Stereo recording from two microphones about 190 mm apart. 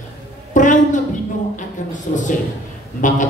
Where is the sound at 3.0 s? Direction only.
40° left (ahead or behind).